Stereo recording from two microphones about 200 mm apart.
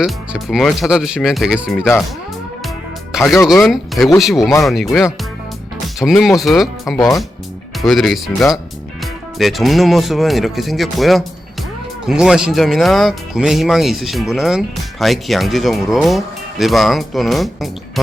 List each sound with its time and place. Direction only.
0.0 s speech: centre (ahead or behind)
3.1 s speech: centre (ahead or behind)
6.9 s speech: 15° left (ahead or behind)
7.8 s speech: centre (ahead or behind)